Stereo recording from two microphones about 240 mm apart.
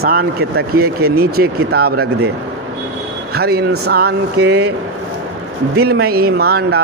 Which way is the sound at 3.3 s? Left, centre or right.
Right.